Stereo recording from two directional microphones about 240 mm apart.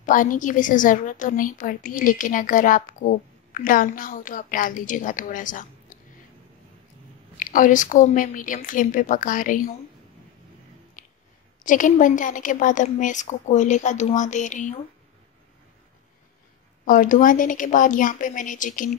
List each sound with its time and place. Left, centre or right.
0.0 s a woman's voice: left
7.5 s a woman's voice: left
11.0 s a sound: left
11.6 s a woman's voice: left
16.8 s a woman's voice: left